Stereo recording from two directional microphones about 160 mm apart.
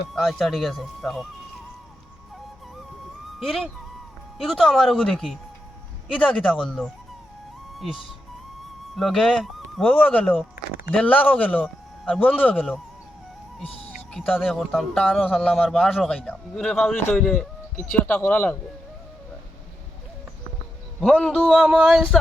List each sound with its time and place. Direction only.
0.1 s speech: centre (ahead or behind)
3.4 s speech: 5° left (ahead or behind)
7.7 s speech: centre (ahead or behind)
10.5 s speech: 65° left (ahead or behind)
10.9 s speech: 10° left (ahead or behind)
14.1 s speech: centre (ahead or behind)
21.0 s speech: centre (ahead or behind)